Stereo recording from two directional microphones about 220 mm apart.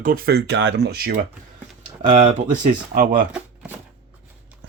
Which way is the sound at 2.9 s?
35° right (ahead or behind).